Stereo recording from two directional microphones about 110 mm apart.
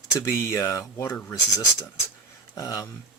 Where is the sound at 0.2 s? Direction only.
25° left (ahead or behind).